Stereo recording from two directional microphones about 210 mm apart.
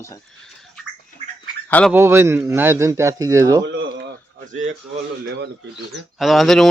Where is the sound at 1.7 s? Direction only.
5° left (ahead or behind).